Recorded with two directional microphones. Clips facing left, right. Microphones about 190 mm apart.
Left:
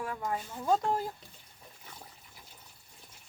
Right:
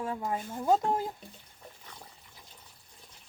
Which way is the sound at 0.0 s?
25° right (ahead or behind).